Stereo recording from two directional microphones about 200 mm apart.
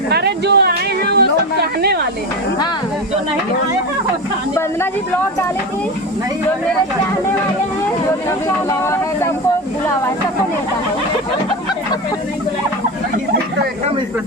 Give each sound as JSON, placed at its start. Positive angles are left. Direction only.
{"t": 0.1, "sound": "music", "side_deg": -55}
{"t": 1.8, "sound": "speech", "side_deg": -55}
{"t": 8.8, "sound": "speech", "side_deg": 15}